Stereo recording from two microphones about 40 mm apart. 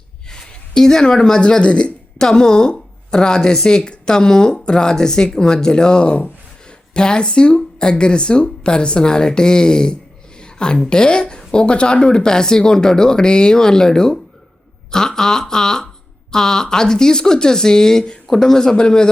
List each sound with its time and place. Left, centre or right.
0.3 s speech: centre
10.4 s a sound: left
10.8 s speech: left